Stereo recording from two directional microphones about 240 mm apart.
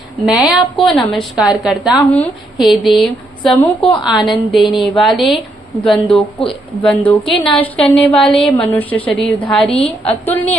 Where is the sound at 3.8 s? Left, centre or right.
Centre.